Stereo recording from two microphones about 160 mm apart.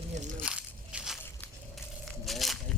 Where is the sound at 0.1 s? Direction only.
50° right (ahead or behind).